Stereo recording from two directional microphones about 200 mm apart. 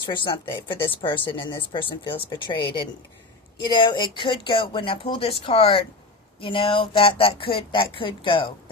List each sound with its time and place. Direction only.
0.0 s speech: 25° left (ahead or behind)